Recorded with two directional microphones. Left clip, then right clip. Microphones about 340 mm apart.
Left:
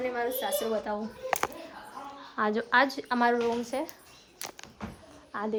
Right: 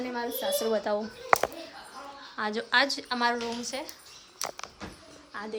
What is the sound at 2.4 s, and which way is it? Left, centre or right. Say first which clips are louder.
A woman's voice: left 1 dB; centre.